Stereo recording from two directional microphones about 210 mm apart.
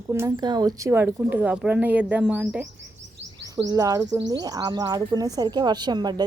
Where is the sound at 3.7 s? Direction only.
15° right (ahead or behind).